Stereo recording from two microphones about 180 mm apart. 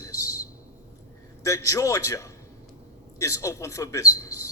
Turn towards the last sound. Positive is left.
turn(degrees=15)  # may be behind; listen again after turning